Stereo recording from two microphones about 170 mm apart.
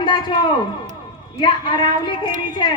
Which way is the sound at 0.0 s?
25° left (ahead or behind).